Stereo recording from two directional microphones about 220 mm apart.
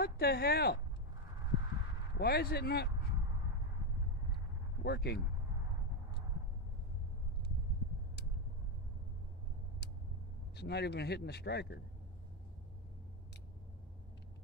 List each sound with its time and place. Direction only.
0.0 s a man's voice: 45° left (ahead or behind)
2.1 s a man's voice: 45° left (ahead or behind)
4.8 s a man's voice: 50° left (ahead or behind)
10.5 s a man's voice: 50° left (ahead or behind)